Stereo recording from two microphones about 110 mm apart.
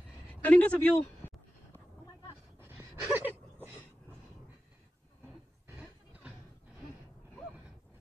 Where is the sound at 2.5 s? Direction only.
20° right (ahead or behind).